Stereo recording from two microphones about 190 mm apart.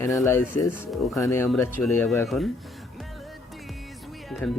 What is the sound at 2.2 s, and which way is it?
Speech, centre (ahead or behind).